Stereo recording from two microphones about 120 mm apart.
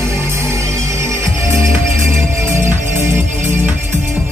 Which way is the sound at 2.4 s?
20° right (ahead or behind).